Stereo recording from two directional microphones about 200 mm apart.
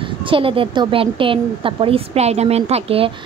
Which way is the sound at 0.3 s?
25° right (ahead or behind).